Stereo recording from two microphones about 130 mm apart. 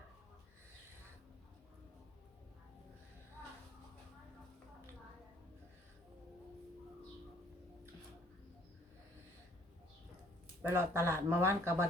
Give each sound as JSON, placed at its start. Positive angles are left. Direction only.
{"t": 10.6, "sound": "speech", "side_deg": -20}